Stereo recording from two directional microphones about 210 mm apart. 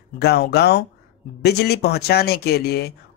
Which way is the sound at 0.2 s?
50° left (ahead or behind).